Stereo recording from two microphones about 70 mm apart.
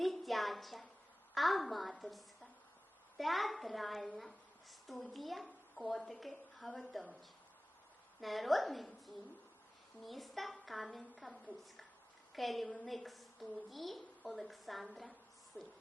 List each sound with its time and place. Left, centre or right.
0.0 s a sound: centre
3.2 s a woman's voice: centre
8.2 s a woman's voice: centre
10.0 s a woman's voice: centre
15.6 s owl: left